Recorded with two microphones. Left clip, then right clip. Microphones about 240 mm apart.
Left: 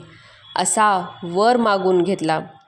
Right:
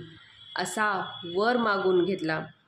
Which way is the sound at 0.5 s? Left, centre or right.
Left.